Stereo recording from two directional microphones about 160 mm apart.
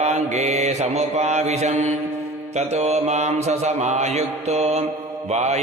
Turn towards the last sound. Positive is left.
turn(degrees=-45)  # may be behind; listen again after turning